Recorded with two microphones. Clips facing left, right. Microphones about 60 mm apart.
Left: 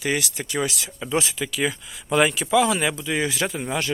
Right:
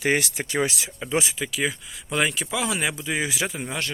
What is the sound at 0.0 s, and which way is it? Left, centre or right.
Speech, right.